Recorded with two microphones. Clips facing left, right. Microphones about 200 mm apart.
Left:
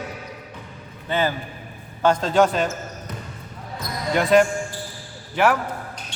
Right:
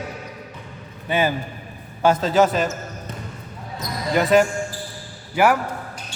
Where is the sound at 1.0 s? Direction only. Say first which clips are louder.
Right 2 dB; 15° right (ahead or behind).